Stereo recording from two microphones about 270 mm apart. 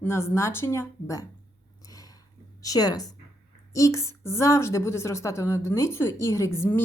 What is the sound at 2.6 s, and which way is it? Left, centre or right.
A woman's voice, centre.